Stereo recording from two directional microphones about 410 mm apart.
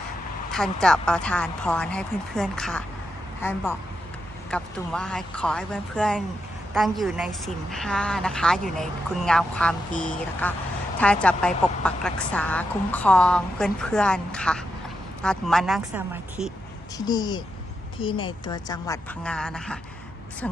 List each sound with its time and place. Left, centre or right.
0.5 s a woman's voice: centre
9.9 s a woman's voice: centre
10.4 s a woman's voice: centre
17.1 s a woman's voice: centre